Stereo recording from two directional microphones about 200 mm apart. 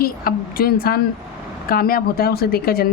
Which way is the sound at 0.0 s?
50° left (ahead or behind).